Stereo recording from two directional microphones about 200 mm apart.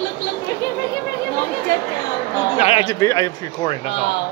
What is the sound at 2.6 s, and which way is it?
Speech, 25° left (ahead or behind).